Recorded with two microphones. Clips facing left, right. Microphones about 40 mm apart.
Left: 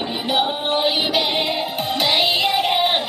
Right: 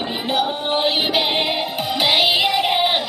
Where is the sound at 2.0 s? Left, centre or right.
Centre.